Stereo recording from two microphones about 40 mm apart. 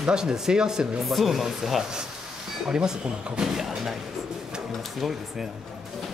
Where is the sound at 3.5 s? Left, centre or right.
Centre.